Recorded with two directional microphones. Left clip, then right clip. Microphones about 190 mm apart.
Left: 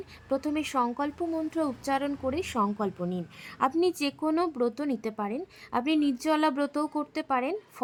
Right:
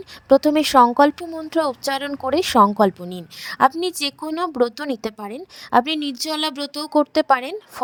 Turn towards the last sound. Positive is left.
turn(degrees=-50)  # may be behind; listen again after turning